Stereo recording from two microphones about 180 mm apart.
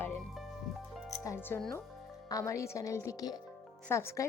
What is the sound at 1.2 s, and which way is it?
Speech, 15° left (ahead or behind).